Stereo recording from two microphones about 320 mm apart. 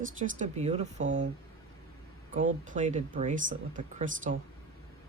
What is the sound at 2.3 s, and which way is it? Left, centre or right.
Speech, right.